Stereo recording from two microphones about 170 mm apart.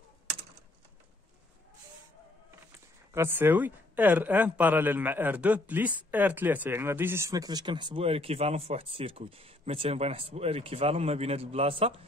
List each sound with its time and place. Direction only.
3.1 s speech: 15° right (ahead or behind); by 12.0 s 35° right (ahead or behind)